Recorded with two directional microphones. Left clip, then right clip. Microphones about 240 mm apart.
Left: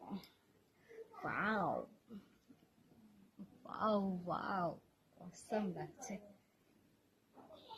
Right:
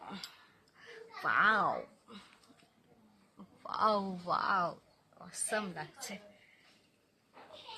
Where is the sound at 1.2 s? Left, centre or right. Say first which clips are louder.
Right 11 dB; centre.